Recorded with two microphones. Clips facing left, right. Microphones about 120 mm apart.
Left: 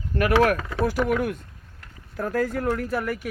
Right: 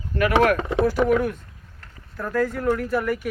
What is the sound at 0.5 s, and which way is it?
Speech, 25° right (ahead or behind).